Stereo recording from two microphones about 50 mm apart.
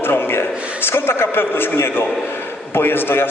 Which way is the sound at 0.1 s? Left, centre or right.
Left.